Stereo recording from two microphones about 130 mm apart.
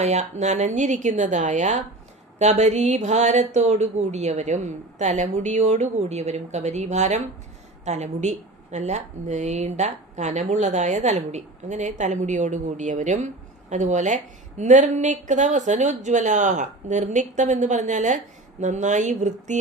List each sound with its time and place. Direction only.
0.0 s a woman's voice: 60° right (ahead or behind)